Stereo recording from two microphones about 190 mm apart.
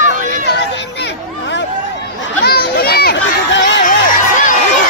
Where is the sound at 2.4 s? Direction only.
55° left (ahead or behind).